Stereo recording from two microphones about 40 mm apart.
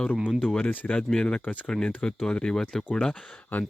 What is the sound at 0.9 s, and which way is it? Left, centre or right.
Speech, left.